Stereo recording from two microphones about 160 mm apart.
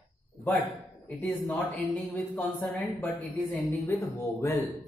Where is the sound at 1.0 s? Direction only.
10° left (ahead or behind).